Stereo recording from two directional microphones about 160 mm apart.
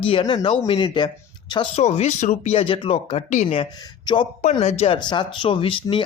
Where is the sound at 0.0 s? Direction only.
35° left (ahead or behind).